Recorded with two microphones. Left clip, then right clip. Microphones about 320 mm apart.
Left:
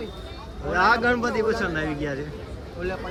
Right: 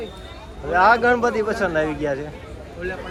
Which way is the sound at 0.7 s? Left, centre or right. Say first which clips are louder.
Right 5 dB; centre.